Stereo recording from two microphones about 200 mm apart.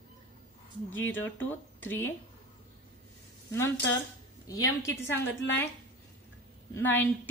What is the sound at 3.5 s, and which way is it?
A woman's voice, 10° left (ahead or behind).